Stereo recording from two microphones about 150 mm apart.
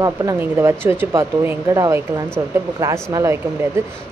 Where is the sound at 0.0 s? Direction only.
25° right (ahead or behind).